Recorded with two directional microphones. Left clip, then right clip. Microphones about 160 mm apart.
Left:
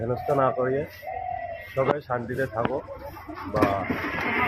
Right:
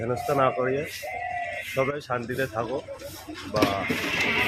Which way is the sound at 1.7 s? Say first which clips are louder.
Left 3 dB; 20° right (ahead or behind).